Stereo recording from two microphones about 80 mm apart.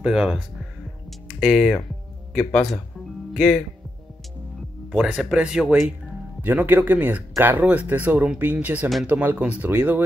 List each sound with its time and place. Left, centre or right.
0.0 s speech: centre
1.4 s speech: centre
3.3 s speech: centre
4.9 s speech: centre
6.4 s speech: right